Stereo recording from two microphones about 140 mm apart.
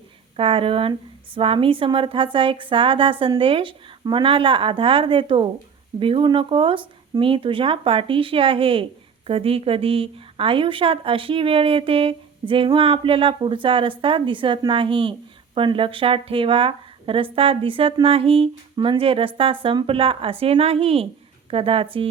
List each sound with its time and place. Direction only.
0.3 s a woman's voice: 40° right (ahead or behind)